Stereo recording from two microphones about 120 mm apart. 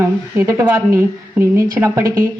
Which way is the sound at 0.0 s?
25° right (ahead or behind).